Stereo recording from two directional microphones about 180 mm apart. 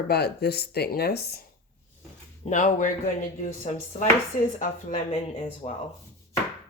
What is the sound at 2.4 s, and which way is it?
Speech, 45° left (ahead or behind).